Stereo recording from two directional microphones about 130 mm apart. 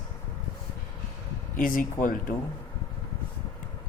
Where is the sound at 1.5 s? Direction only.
90° left.